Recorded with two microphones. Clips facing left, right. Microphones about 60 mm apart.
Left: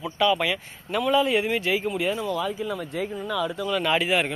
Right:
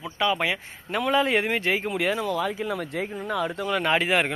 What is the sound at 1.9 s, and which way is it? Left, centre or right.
Speech, right.